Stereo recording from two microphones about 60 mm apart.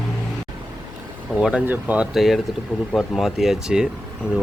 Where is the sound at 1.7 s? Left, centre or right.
Right.